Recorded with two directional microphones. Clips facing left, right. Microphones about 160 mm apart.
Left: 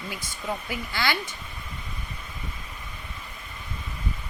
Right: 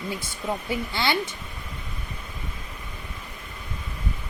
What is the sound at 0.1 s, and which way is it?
Speech, 25° right (ahead or behind).